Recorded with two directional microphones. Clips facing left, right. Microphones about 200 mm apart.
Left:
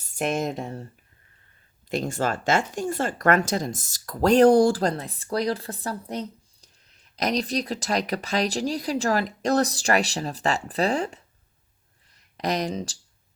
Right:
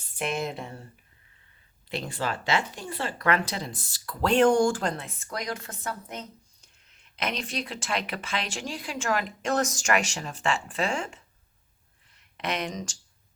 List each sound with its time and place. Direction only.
0.2 s speech: 40° left (ahead or behind)
1.9 s speech: 45° left (ahead or behind)